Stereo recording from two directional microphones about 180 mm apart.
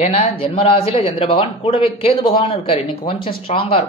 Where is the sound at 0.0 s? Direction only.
35° left (ahead or behind).